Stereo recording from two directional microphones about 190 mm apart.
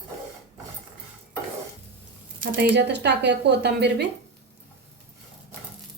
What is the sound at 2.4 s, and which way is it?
A woman's voice, 50° right (ahead or behind).